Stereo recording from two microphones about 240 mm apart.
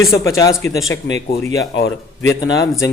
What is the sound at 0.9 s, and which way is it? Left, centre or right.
Speech, left.